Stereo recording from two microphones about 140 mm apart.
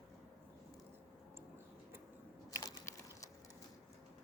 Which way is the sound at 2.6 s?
25° left (ahead or behind).